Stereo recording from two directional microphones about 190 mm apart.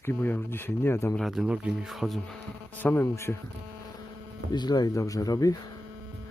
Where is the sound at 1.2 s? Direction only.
Centre (ahead or behind).